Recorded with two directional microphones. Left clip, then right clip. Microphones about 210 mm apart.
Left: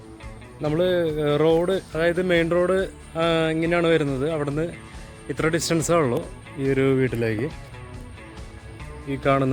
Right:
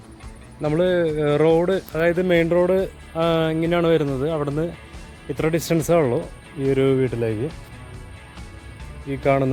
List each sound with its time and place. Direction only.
0.6 s speech: centre (ahead or behind)
9.0 s speech: centre (ahead or behind)